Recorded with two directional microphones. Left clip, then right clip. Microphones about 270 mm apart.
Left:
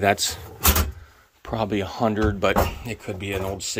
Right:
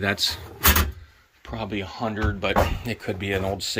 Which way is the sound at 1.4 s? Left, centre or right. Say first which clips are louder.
Left 6 dB; left.